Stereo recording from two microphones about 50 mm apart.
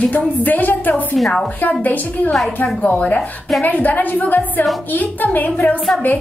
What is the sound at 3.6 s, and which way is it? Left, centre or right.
A woman's voice, left.